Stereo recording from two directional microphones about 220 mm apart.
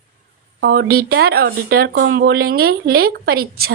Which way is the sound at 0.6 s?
50° right (ahead or behind).